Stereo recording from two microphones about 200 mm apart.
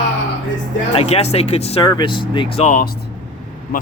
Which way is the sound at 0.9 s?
30° left (ahead or behind).